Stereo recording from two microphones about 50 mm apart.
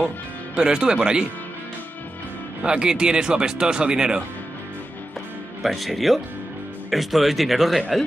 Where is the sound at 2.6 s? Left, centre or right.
Centre.